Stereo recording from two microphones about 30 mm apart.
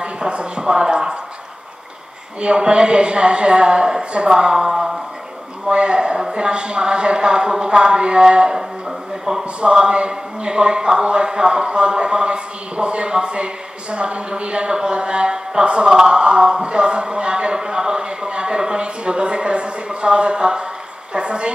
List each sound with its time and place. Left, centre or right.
0.0 s speech: right
2.4 s speech: right
4.3 s speech: right
5.7 s speech: right
5.9 s speech: right
9.6 s speech: right